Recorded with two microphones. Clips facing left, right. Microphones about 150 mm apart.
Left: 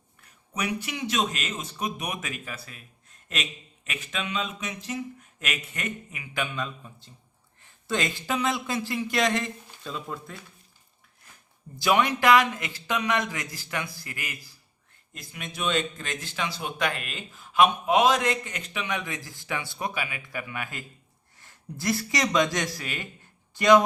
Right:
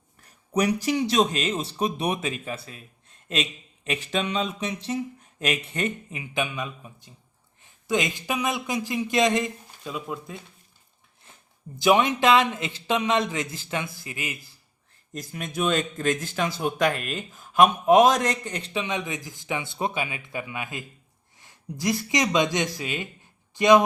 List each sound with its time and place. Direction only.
0.2 s speech: 40° right (ahead or behind)
3.8 s speech: 30° right (ahead or behind); by 10.4 s 15° right (ahead or behind)
11.3 s a sound: 25° right (ahead or behind)
11.8 s a man's voice: 20° right (ahead or behind)
15.1 s speech: 40° right (ahead or behind); by 23.8 s 20° right (ahead or behind)